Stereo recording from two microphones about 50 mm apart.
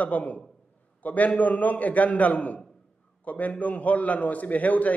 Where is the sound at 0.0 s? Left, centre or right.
Left.